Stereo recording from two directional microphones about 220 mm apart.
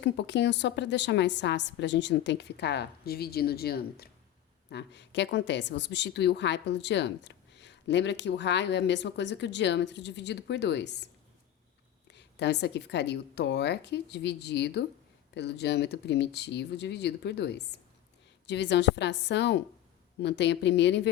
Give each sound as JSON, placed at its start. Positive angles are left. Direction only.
{"t": 0.0, "sound": "speech", "side_deg": 50}
{"t": 12.1, "sound": "speech", "side_deg": 50}